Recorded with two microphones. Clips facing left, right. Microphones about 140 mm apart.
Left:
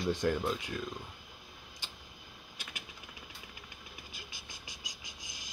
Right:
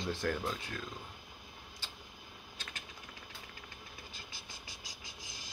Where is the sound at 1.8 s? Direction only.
15° left (ahead or behind).